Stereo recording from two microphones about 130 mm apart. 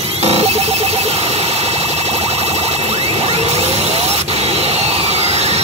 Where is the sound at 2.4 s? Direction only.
50° right (ahead or behind).